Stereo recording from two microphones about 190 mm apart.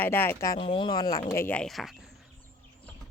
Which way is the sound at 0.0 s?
10° left (ahead or behind).